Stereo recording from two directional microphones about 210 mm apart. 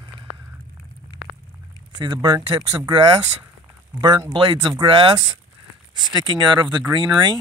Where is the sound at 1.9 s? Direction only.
20° right (ahead or behind).